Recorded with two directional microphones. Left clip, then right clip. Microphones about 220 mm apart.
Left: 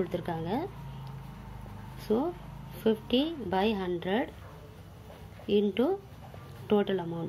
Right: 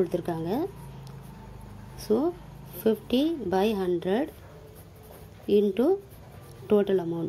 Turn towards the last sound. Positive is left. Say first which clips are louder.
# right 5 dB
turn(degrees=-50)  # may be behind; listen again after turning